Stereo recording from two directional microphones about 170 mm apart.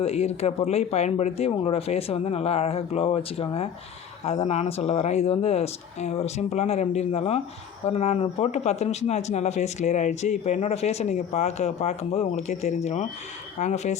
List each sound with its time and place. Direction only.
0.0 s speech: 35° left (ahead or behind)